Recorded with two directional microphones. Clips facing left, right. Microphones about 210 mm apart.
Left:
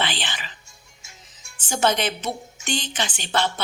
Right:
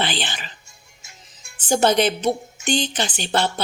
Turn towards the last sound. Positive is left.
turn(degrees=-35)  # may be behind; listen again after turning